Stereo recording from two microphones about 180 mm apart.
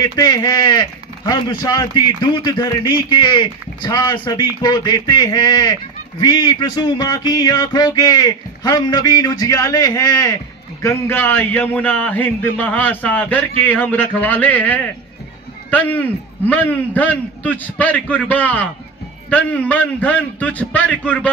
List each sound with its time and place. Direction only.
0.0 s a man's voice: 20° left (ahead or behind)